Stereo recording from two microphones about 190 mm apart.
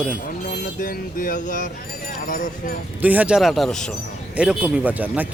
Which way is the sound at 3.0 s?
10° right (ahead or behind).